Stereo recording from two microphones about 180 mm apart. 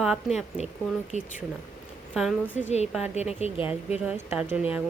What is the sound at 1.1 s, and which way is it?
Speech, 40° left (ahead or behind).